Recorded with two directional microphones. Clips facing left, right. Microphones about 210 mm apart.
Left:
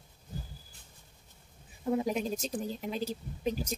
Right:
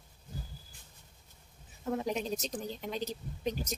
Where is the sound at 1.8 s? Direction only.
10° left (ahead or behind).